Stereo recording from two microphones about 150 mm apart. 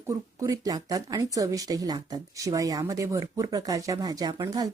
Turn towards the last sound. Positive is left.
turn(degrees=-20)  # may be behind; listen again after turning